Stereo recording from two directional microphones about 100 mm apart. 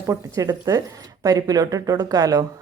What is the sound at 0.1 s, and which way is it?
A woman's voice, 35° right (ahead or behind).